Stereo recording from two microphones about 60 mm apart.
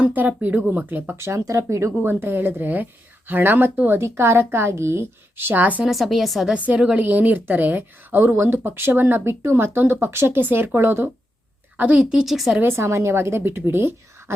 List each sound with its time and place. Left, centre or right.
0.0 s a woman's voice: right
1.1 s speech: right
2.0 s speech: right
4.0 s a woman's voice: right
5.8 s speech: centre
6.5 s a woman's voice: right
8.2 s speech: right
11.8 s a woman's voice: centre
12.2 s speech: centre
12.6 s a woman's voice: right